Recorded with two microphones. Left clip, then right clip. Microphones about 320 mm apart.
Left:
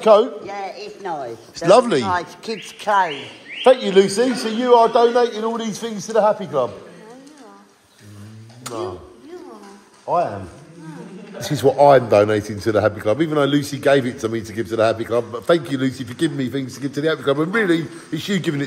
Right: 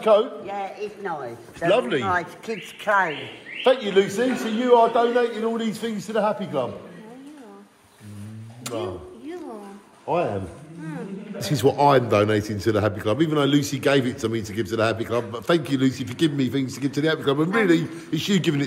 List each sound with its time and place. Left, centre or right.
0.0 s a man's voice: left
8.6 s a sound: centre
10.1 s a man's voice: centre
11.3 s a man's voice: centre